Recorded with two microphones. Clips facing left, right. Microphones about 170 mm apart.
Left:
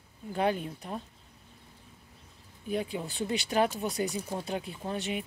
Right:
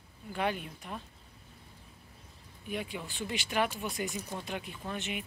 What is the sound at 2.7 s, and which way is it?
Speech, 35° left (ahead or behind).